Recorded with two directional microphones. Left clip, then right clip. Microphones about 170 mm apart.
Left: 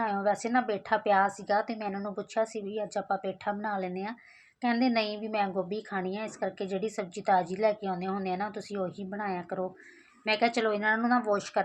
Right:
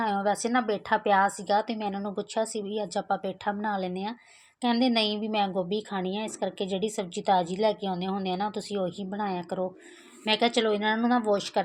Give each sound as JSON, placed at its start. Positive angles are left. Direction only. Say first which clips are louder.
{"t": 0.0, "sound": "speech", "louder": "right 2 dB", "side_deg": -35}